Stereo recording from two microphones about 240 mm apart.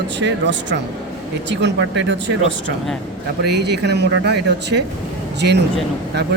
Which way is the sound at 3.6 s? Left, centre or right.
Right.